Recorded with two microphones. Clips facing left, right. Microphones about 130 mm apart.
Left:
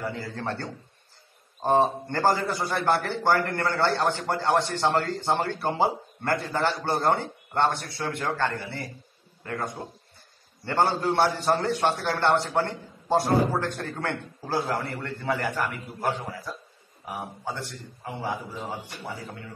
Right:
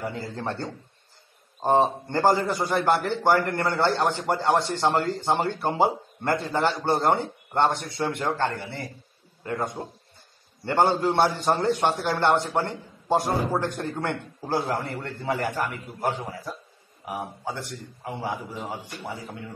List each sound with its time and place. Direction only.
0.0 s a man's voice: 20° right (ahead or behind)